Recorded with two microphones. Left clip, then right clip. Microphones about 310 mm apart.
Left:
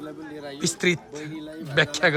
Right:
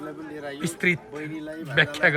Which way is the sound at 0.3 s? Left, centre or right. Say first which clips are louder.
Left 3 dB; centre.